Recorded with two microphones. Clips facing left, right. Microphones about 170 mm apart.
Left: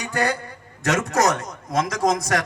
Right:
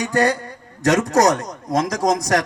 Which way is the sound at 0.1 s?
35° right (ahead or behind).